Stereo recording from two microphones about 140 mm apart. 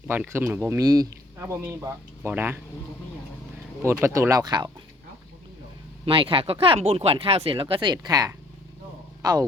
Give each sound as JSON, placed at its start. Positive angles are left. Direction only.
{"t": 0.1, "sound": "speech", "side_deg": -15}
{"t": 1.4, "sound": "speech", "side_deg": -15}
{"t": 3.8, "sound": "speech", "side_deg": -20}
{"t": 6.1, "sound": "speech", "side_deg": -40}